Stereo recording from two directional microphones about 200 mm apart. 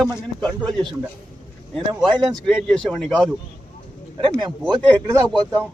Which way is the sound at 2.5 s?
5° left (ahead or behind).